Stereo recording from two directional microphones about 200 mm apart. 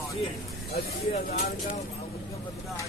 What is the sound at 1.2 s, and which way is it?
Speech, 50° left (ahead or behind).